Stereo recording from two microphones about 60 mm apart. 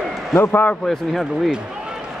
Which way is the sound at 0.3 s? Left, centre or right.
Left.